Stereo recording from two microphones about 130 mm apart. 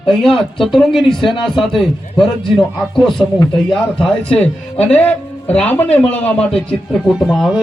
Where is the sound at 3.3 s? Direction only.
35° left (ahead or behind).